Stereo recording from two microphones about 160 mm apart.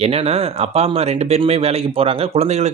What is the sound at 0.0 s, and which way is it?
Speech, 40° right (ahead or behind).